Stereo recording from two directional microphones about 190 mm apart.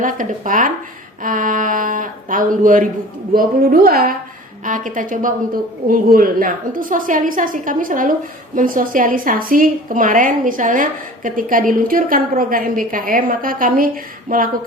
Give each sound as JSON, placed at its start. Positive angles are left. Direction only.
{"t": 0.0, "sound": "a woman's voice", "side_deg": -45}